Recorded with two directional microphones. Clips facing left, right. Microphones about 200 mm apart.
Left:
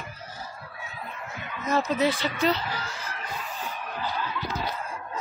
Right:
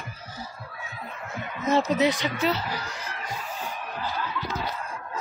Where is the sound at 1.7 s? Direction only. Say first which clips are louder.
Right 2 dB; 20° right (ahead or behind).